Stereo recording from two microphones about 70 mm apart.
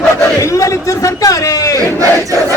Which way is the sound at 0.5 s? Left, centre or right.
Left.